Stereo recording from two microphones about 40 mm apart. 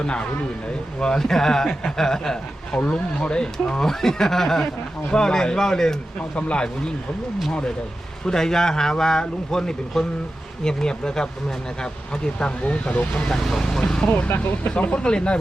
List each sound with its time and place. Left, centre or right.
0.0 s speech: left
2.8 s speech: left
6.1 s speech: left
8.2 s speech: centre
10.0 s speech: centre
10.6 s speech: centre
12.9 s speech: left
13.2 s speech: centre
14.3 s speech: left
14.8 s speech: left